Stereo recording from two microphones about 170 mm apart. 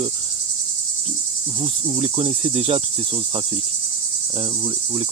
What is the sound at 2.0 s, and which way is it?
Cricket, 35° right (ahead or behind).